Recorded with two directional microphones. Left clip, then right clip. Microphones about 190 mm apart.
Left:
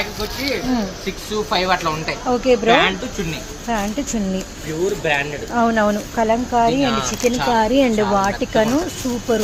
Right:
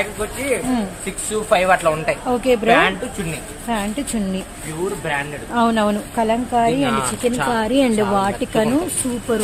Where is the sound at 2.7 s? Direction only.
45° right (ahead or behind).